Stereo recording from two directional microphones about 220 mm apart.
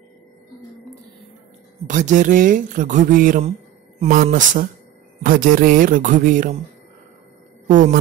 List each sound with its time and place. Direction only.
1.9 s speech: 35° right (ahead or behind)
7.6 s speech: 35° right (ahead or behind)